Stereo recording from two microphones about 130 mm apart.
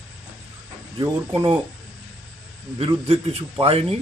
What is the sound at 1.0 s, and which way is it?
Speech, 40° right (ahead or behind).